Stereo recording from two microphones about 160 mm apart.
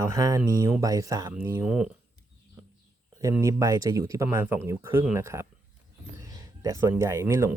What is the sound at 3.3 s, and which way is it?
Speech, 20° right (ahead or behind).